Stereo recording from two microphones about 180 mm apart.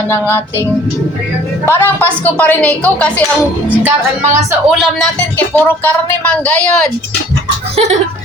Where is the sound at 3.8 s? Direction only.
10° right (ahead or behind).